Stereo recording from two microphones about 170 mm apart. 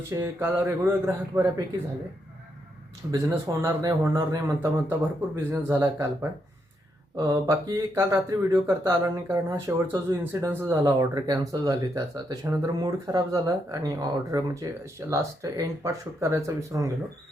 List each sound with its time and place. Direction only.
0.1 s a man's voice: 15° right (ahead or behind)
3.1 s a man's voice: 20° right (ahead or behind)
7.2 s speech: 20° right (ahead or behind)